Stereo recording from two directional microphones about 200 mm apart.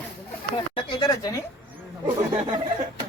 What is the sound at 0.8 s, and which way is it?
Speech, 20° left (ahead or behind).